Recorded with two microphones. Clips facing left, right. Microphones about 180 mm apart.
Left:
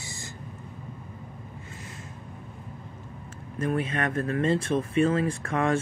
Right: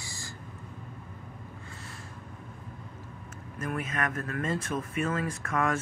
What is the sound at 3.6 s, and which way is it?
Speech, 30° left (ahead or behind).